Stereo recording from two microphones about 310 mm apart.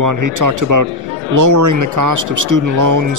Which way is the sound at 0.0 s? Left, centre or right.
Right.